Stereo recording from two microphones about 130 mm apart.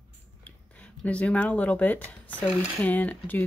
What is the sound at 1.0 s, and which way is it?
Speech, 10° left (ahead or behind).